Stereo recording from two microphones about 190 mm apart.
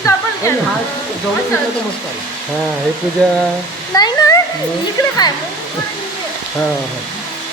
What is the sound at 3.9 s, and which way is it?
Speech, 20° left (ahead or behind).